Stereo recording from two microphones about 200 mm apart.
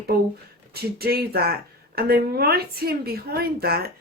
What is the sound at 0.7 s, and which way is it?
A woman's voice, 50° right (ahead or behind).